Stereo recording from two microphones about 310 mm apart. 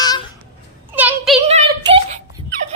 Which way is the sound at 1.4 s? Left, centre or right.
Right.